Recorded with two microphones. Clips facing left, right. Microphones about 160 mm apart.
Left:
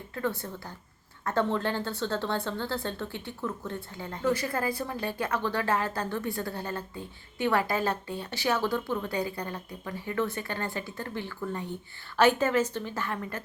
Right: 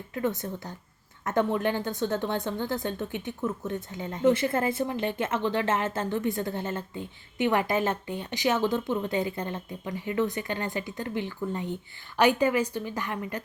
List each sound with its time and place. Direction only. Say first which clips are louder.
0.1 s a woman's voice: right 3 dB; 20° right (ahead or behind)